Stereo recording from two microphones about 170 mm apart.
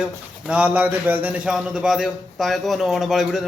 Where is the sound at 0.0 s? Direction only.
5° right (ahead or behind).